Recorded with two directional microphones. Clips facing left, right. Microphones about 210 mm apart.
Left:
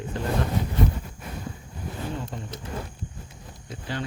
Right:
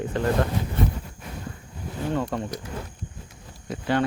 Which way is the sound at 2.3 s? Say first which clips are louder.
Right 8 dB; 75° right (ahead or behind).